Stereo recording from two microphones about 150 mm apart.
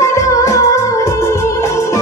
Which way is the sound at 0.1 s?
20° left (ahead or behind).